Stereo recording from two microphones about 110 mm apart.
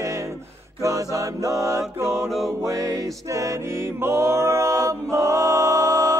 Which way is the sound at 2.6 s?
30° right (ahead or behind).